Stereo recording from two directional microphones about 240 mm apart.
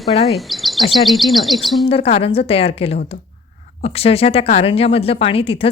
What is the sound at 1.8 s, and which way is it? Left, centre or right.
Speech, left.